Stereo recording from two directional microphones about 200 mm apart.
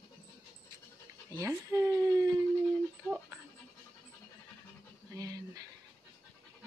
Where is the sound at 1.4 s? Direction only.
15° right (ahead or behind).